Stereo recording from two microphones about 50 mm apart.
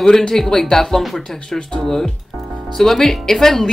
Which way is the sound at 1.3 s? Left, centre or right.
Centre.